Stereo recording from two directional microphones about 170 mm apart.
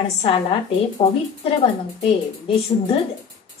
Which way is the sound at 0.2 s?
35° left (ahead or behind).